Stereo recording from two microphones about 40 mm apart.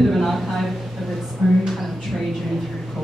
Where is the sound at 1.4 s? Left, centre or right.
Centre.